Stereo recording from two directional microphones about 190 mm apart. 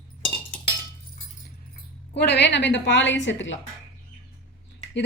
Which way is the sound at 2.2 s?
60° left (ahead or behind).